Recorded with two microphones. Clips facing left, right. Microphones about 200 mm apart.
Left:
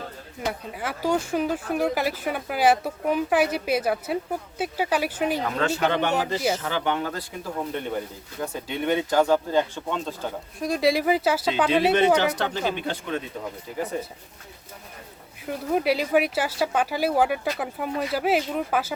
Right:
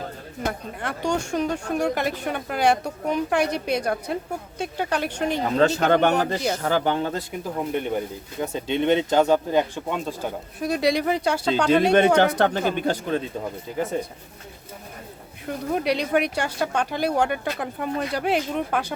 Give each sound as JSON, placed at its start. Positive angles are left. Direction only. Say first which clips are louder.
{"t": 0.8, "sound": "speech", "louder": "left 1 dB", "side_deg": 5}
{"t": 5.4, "sound": "speech", "louder": "right 4 dB", "side_deg": -35}
{"t": 10.6, "sound": "speech", "louder": "even", "side_deg": 0}
{"t": 11.9, "sound": "speech", "louder": "right 2 dB", "side_deg": -50}
{"t": 13.7, "sound": "speech", "louder": "right 3 dB", "side_deg": -25}
{"t": 15.4, "sound": "speech", "louder": "left 1 dB", "side_deg": 5}